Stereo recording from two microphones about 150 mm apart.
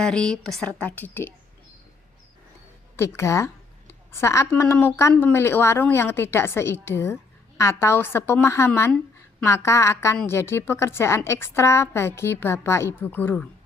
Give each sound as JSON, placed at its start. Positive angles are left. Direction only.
{"t": 0.0, "sound": "a woman's voice", "side_deg": 5}
{"t": 2.9, "sound": "a woman's voice", "side_deg": 15}